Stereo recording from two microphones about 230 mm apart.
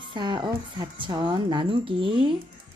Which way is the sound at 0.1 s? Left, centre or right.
Centre.